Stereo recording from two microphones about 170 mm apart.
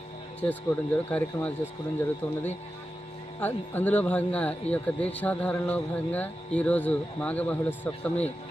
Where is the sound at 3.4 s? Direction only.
10° left (ahead or behind).